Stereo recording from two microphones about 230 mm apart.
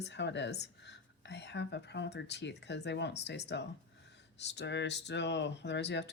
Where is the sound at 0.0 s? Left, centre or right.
Left.